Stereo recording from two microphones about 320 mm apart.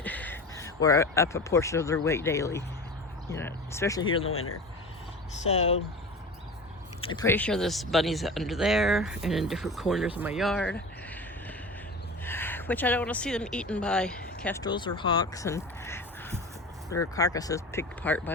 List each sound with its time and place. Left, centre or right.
0.0 s speech: centre
4.3 s speech: left
5.4 s speech: centre
7.0 s speech: centre
12.2 s speech: centre